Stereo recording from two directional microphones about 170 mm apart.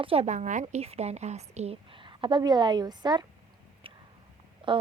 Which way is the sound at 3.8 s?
30° right (ahead or behind).